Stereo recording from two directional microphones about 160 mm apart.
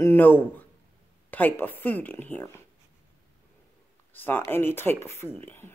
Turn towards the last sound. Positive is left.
turn(degrees=15)  # may be behind; listen again after turning